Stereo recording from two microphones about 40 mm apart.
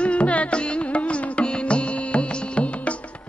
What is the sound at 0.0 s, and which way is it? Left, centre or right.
Carnatic music, left.